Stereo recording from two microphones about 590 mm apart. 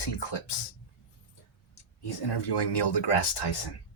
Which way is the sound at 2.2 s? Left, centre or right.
Left.